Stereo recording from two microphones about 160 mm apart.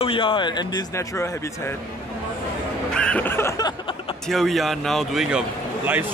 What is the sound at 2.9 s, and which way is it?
Music, 5° left (ahead or behind).